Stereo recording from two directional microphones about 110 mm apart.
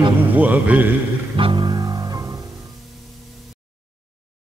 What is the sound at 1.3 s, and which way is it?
Music, 50° right (ahead or behind).